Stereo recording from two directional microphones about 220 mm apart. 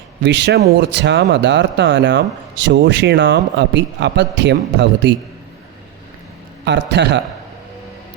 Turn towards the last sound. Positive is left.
turn(degrees=-50)  # may be behind; listen again after turning